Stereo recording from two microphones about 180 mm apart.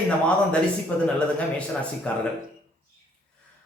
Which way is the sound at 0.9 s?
5° left (ahead or behind).